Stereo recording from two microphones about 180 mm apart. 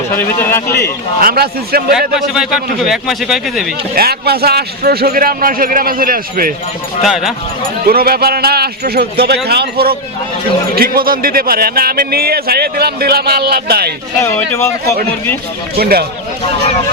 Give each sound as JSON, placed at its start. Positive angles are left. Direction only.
{"t": 0.2, "sound": "speech", "side_deg": 15}
{"t": 1.2, "sound": "a man's voice", "side_deg": -55}
{"t": 1.9, "sound": "a man's voice", "side_deg": -5}
{"t": 3.9, "sound": "a man's voice", "side_deg": -60}
{"t": 7.0, "sound": "a man's voice", "side_deg": 0}
{"t": 7.9, "sound": "a man's voice", "side_deg": -55}
{"t": 14.2, "sound": "speech", "side_deg": 15}
{"t": 15.8, "sound": "a man's voice", "side_deg": -60}